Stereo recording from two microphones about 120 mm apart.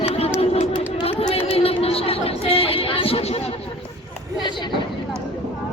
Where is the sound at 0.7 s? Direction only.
40° left (ahead or behind).